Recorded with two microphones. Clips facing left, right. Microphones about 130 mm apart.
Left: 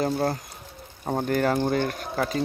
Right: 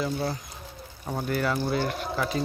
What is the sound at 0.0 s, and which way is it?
Speech, 50° left (ahead or behind).